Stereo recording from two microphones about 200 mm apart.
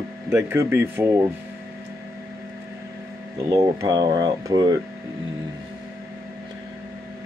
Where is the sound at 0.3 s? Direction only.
15° right (ahead or behind).